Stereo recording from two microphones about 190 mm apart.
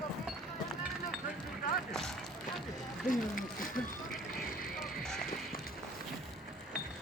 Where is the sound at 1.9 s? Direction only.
Centre (ahead or behind).